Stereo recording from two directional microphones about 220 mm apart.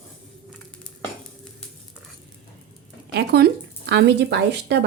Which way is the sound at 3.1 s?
45° right (ahead or behind).